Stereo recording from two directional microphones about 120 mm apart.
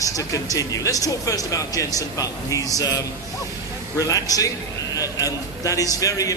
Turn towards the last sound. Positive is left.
turn(degrees=30)  # may be behind; listen again after turning